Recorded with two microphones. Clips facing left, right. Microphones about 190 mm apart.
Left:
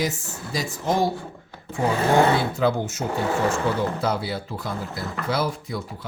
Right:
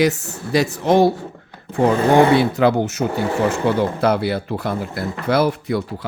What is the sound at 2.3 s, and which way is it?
Speech, 70° right (ahead or behind).